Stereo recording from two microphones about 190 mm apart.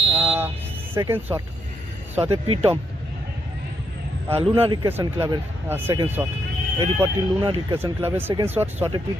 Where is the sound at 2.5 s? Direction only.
30° right (ahead or behind).